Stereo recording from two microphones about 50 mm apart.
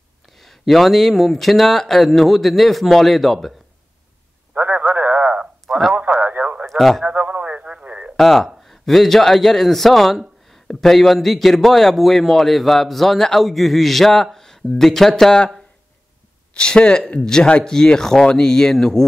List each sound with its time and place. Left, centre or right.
0.3 s a man's voice: centre
4.6 s radio: right
6.7 s speech: centre
7.1 s radio: right
8.2 s a man's voice: centre
16.5 s speech: centre